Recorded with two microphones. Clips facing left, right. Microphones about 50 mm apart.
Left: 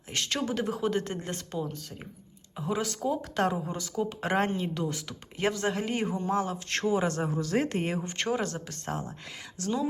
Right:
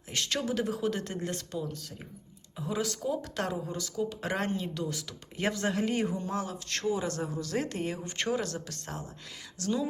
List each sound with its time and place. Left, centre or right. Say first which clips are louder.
0.1 s a woman's voice: left 1 dB; centre
5.4 s speech: left 1 dB; centre
6.7 s speech: left 4 dB; left
7.2 s speech: left 4 dB; left
8.0 s a woman's voice: left 2 dB; centre